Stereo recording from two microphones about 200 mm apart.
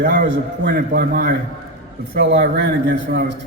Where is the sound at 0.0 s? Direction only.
65° right (ahead or behind).